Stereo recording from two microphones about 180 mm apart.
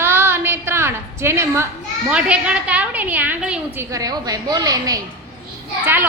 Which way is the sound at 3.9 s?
20° right (ahead or behind).